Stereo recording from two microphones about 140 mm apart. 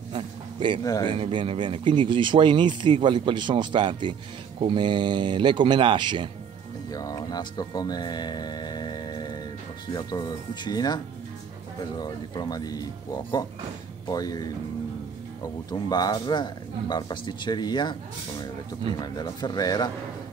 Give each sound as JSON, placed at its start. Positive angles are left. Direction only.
{"t": 0.1, "sound": "a sound", "side_deg": -35}
{"t": 0.8, "sound": "speech", "side_deg": 25}
{"t": 1.1, "sound": "speech", "side_deg": -40}
{"t": 6.9, "sound": "speech", "side_deg": 25}
{"t": 12.0, "sound": "speech", "side_deg": 30}
{"t": 15.9, "sound": "speech", "side_deg": 30}
{"t": 18.9, "sound": "speech", "side_deg": 30}